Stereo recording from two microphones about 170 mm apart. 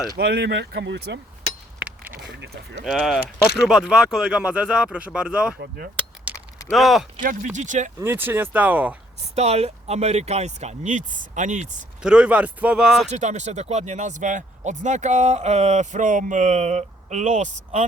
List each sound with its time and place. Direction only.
0.2 s speech: 85° right
2.8 s speech: centre (ahead or behind)
5.5 s speech: 60° right (ahead or behind)
6.3 s a sound: 10° right (ahead or behind)
6.7 s speech: centre (ahead or behind)
7.2 s speech: 45° right (ahead or behind)
7.9 s speech: 15° right (ahead or behind)
9.3 s speech: 40° right (ahead or behind)
12.0 s speech: 5° right (ahead or behind)
13.1 s speech: 45° right (ahead or behind)